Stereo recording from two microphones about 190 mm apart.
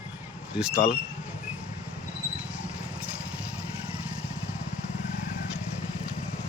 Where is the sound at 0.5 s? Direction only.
5° right (ahead or behind).